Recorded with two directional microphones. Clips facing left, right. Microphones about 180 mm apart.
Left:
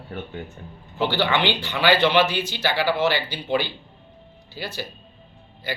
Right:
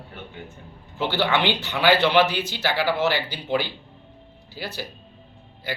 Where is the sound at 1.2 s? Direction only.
5° right (ahead or behind).